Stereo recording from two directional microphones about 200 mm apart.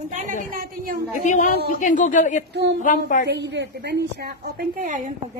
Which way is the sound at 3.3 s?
60° right (ahead or behind).